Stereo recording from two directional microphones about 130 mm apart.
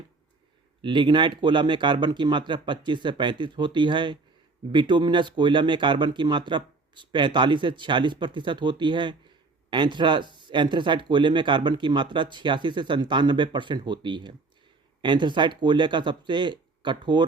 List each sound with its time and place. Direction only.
0.8 s speech: 35° right (ahead or behind)